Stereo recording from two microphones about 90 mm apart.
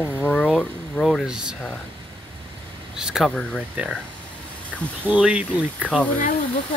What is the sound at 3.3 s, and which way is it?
Speech, 10° left (ahead or behind).